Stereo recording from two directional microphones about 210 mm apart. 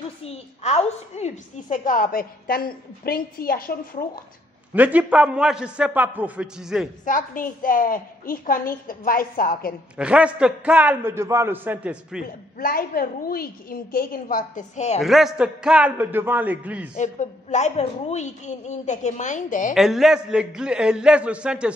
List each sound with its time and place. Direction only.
0.2 s a woman's voice: 30° left (ahead or behind)
4.7 s a man's voice: 5° right (ahead or behind)
7.1 s a woman's voice: 40° left (ahead or behind)
9.9 s a man's voice: 5° right (ahead or behind)
12.5 s a woman's voice: 45° left (ahead or behind)
15.0 s a man's voice: centre (ahead or behind)
16.9 s a woman's voice: 35° left (ahead or behind)
19.7 s a man's voice: centre (ahead or behind)